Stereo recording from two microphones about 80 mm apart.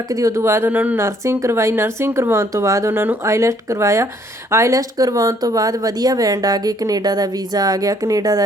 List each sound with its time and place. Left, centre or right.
0.1 s speech: right
0.7 s a woman's voice: right
1.0 s speech: right
2.9 s speech: right